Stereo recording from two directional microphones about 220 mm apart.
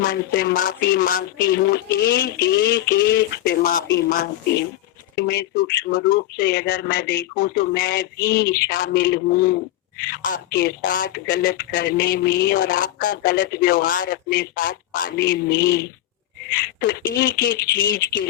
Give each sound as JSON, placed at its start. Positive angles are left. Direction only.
{"t": 0.0, "sound": "speech", "side_deg": 40}
{"t": 5.9, "sound": "speech", "side_deg": 40}